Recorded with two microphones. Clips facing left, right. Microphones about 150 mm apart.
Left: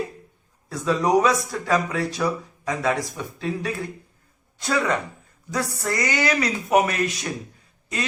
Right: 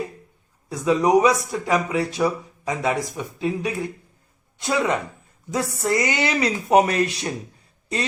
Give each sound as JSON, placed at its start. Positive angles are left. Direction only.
{"t": 0.7, "sound": "speech", "side_deg": -15}